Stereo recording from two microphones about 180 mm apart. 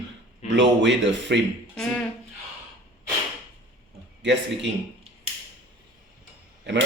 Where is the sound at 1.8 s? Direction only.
5° left (ahead or behind).